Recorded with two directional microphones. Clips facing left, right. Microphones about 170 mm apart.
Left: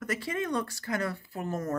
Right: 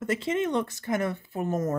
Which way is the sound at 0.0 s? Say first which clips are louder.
Right 5 dB; 25° right (ahead or behind).